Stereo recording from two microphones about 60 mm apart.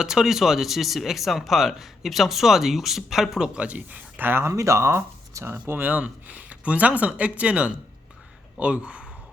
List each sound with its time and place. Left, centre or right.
0.0 s speech: centre; by 4.4 s right
4.4 s speech: right; by 9.0 s centre